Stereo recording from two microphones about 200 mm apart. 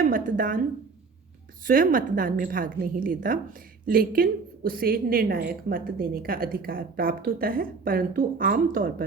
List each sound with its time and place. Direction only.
0.0 s a woman's voice: 45° right (ahead or behind)
1.6 s a woman's voice: 45° right (ahead or behind)